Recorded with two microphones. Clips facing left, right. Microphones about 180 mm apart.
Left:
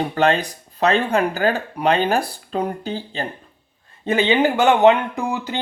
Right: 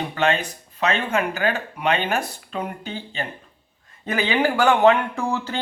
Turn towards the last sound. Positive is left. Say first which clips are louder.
# left 1 dB
turn(degrees=15)  # may be behind; listen again after turning